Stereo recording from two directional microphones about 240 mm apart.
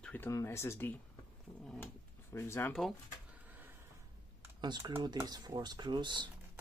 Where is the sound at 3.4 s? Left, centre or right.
Centre.